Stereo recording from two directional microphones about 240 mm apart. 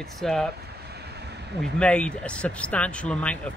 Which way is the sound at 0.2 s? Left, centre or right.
Centre.